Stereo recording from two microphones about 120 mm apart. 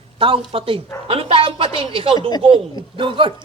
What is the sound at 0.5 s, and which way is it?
A man's voice, 50° right (ahead or behind).